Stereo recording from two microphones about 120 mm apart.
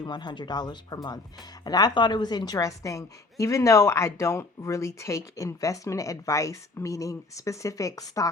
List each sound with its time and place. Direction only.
0.0 s a woman's voice: 40° left (ahead or behind)